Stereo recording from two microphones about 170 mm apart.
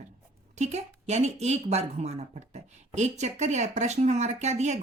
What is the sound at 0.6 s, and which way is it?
A woman's voice, 40° right (ahead or behind).